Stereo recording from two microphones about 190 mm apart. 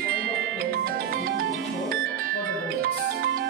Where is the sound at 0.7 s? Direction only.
50° right (ahead or behind).